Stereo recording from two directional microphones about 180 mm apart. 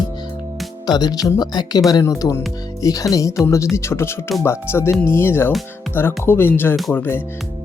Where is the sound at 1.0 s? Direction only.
20° left (ahead or behind).